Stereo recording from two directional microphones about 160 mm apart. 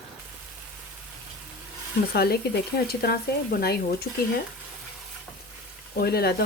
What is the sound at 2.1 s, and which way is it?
Speech, 80° left.